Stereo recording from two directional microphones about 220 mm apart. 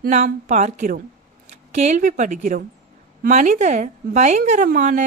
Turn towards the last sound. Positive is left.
turn(degrees=-35)  # may be behind; listen again after turning